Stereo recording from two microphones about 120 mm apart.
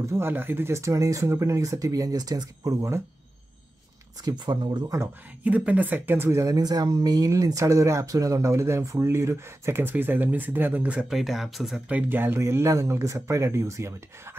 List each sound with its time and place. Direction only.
0.0 s speech: 20° right (ahead or behind)
4.2 s speech: 35° right (ahead or behind)
5.4 s speech: 10° right (ahead or behind)
12.1 s speech: 20° right (ahead or behind)